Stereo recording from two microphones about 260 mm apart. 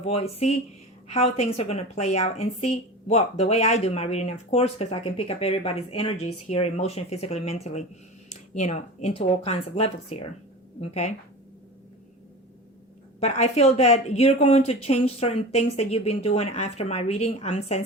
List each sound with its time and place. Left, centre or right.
0.0 s speech: left
13.1 s speech: left